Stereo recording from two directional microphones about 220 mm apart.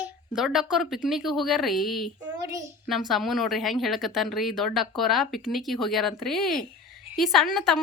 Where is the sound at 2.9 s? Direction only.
Centre (ahead or behind).